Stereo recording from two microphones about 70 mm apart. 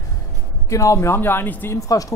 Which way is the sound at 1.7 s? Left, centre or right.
Left.